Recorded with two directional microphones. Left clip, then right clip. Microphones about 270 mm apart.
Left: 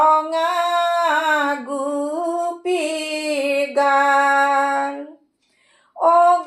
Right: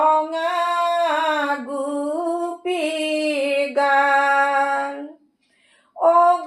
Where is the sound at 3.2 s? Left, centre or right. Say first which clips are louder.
Left 2 dB; left.